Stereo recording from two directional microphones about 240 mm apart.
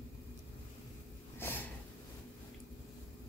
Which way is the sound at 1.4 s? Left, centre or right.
Centre.